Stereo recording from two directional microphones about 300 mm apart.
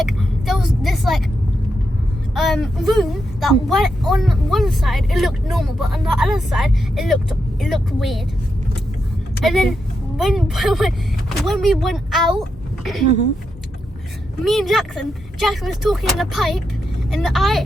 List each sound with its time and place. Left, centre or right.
0.0 s a woman's voice: centre
2.3 s speech: centre
9.4 s a woman's voice: centre
14.4 s speech: centre